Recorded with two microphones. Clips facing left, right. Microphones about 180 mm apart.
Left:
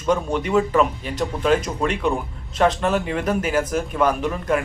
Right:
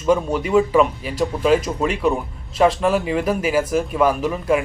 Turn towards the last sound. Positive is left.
turn(degrees=-5)  # may be behind; listen again after turning